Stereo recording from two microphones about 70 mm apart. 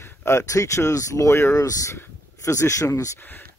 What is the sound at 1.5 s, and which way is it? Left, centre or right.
Speech, left.